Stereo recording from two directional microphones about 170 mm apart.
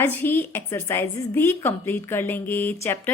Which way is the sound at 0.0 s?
10° left (ahead or behind).